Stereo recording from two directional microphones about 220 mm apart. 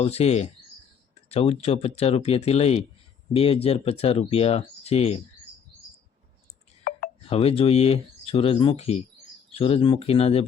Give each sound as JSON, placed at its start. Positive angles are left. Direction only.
{"t": 0.0, "sound": "speech", "side_deg": 30}
{"t": 7.3, "sound": "speech", "side_deg": 25}